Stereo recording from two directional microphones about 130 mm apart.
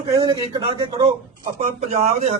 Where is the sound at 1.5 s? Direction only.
55° right (ahead or behind).